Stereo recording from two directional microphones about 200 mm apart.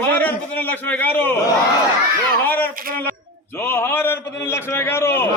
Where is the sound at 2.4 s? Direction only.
10° left (ahead or behind).